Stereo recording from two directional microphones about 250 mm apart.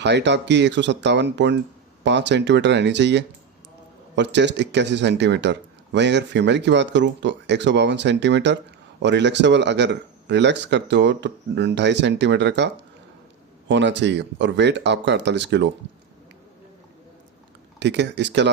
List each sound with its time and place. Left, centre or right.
0.0 s speech: right
17.7 s speech: right